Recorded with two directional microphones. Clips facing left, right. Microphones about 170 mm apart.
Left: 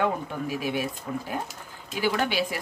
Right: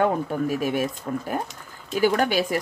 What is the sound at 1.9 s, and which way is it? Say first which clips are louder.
Speech: right 5 dB; 45° right (ahead or behind).